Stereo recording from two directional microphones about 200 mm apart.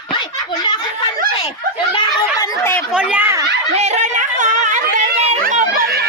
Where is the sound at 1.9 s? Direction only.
15° left (ahead or behind).